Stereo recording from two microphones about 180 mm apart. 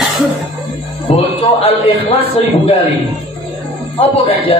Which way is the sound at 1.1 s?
30° left (ahead or behind).